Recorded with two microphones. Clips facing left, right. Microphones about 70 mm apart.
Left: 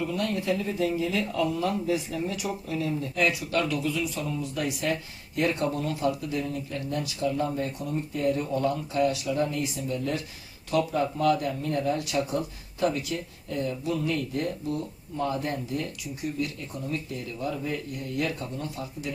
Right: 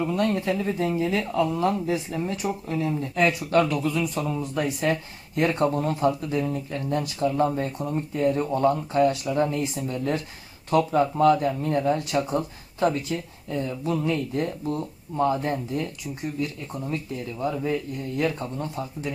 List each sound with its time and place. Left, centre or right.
0.0 s speech: right
4.3 s speech: right
17.4 s speech: right